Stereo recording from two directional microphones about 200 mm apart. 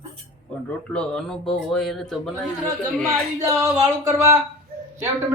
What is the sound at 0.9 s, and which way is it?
Speech, 5° left (ahead or behind).